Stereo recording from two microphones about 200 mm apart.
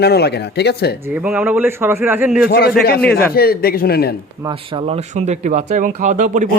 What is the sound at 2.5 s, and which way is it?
Speech, 50° left (ahead or behind).